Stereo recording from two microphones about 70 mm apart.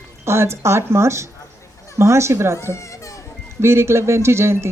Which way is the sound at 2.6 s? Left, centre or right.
Left.